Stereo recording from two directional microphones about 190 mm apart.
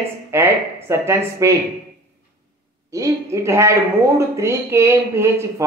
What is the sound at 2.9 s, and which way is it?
Speech, 15° right (ahead or behind).